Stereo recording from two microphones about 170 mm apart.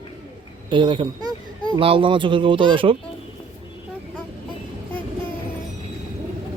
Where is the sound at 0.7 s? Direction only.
30° right (ahead or behind).